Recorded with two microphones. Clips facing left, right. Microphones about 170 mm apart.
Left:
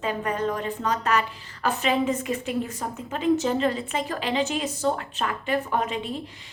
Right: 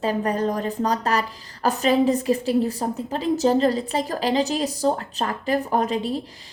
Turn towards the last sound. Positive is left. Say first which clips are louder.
# right 5 dB
turn(degrees=-35)  # may be behind; listen again after turning